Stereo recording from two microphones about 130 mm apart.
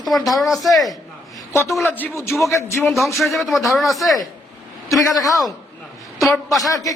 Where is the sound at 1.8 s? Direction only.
15° left (ahead or behind).